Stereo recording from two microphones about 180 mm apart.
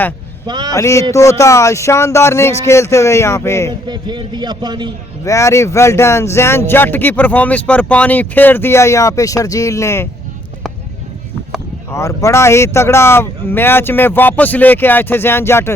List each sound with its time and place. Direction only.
0.4 s a man's voice: 25° right (ahead or behind)
0.7 s speech: 15° left (ahead or behind)
3.7 s a man's voice: 25° right (ahead or behind)
5.2 s speech: 15° left (ahead or behind)
11.9 s speech: 15° left (ahead or behind)